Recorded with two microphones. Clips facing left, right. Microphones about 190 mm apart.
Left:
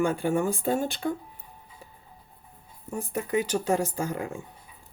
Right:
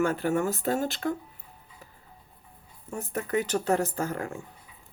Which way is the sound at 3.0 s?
10° left (ahead or behind).